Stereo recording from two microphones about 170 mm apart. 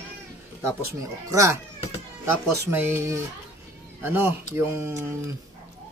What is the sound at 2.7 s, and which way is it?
Speech, 15° right (ahead or behind).